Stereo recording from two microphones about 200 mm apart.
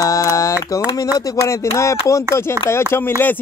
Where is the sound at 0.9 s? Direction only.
20° left (ahead or behind).